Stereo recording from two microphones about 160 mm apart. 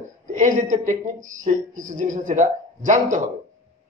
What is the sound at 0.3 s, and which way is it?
Speech, 55° right (ahead or behind).